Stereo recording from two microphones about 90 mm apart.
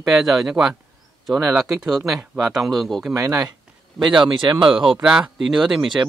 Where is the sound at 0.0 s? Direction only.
5° right (ahead or behind).